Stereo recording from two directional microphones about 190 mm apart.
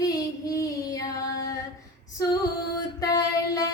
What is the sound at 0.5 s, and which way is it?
Child singing, 15° left (ahead or behind).